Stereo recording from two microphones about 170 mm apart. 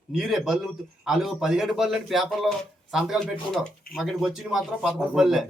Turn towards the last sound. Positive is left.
turn(degrees=0)  # may be behind; listen again after turning